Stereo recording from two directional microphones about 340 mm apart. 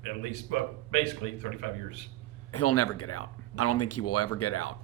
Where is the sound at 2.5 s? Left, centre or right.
Left.